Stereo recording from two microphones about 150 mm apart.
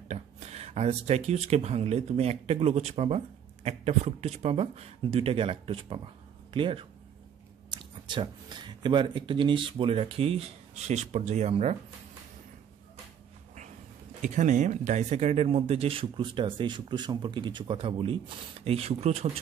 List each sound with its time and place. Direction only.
0.1 s speech: 45° right (ahead or behind)
14.2 s speech: 55° right (ahead or behind)